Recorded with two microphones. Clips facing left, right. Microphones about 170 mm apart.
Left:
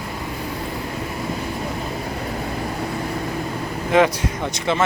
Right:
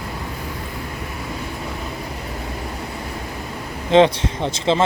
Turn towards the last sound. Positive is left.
turn(degrees=-25)  # may be behind; listen again after turning